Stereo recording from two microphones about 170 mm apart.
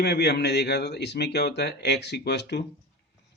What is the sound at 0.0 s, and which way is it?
Speech, 75° left (ahead or behind).